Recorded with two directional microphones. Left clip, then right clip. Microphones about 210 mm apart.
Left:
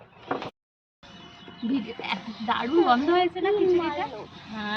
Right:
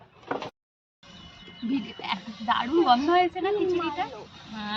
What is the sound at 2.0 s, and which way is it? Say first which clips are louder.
Speech: right 3 dB; centre (ahead or behind).